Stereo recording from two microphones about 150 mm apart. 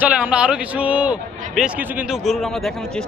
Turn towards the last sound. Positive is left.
turn(degrees=5)  # may be behind; listen again after turning